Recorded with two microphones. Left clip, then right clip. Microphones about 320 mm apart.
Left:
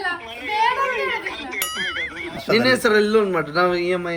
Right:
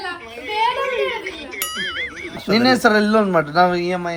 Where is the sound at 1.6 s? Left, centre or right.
Centre.